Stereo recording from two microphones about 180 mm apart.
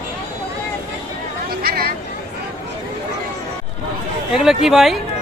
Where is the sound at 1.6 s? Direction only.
55° right (ahead or behind).